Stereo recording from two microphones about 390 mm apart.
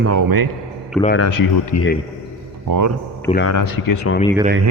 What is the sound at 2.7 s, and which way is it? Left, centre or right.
Speech, right.